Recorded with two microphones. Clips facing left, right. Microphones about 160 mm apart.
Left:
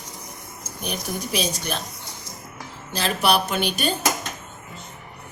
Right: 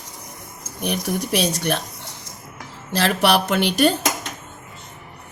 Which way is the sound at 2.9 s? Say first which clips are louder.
Right 3 dB; 80° right.